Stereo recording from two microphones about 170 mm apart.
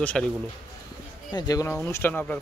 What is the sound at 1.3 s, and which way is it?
Speech, 20° left (ahead or behind).